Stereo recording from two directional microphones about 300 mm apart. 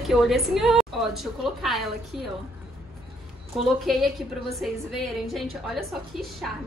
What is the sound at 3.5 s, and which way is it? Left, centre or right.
A woman's voice, centre.